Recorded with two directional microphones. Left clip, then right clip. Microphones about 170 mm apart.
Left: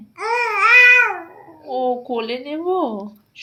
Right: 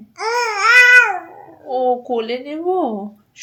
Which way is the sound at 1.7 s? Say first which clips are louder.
Right 3 dB; 25° right (ahead or behind).